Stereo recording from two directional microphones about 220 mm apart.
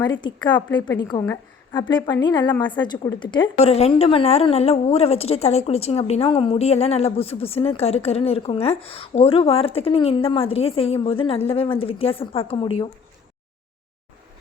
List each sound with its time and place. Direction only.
0.0 s a woman's voice: 20° left (ahead or behind)